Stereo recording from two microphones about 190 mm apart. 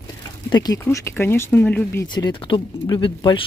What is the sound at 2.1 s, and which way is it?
Speech, 25° left (ahead or behind).